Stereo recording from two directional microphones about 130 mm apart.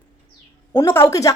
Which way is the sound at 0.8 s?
20° left (ahead or behind).